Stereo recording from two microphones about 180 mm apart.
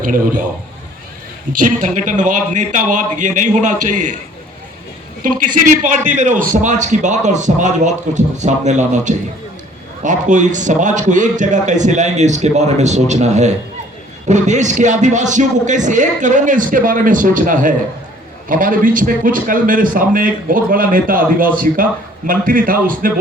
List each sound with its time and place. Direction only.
0.0 s a man's voice: 50° right (ahead or behind)
1.5 s a man's voice: 45° right (ahead or behind)
5.2 s a man's voice: 45° right (ahead or behind)